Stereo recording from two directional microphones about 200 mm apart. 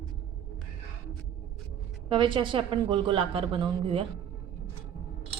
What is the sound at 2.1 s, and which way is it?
Speech, 25° right (ahead or behind).